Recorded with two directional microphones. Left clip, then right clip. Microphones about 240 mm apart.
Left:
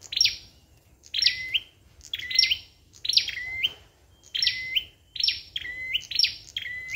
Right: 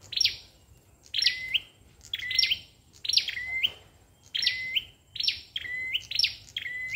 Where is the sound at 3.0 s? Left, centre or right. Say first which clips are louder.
Left 2 dB; centre.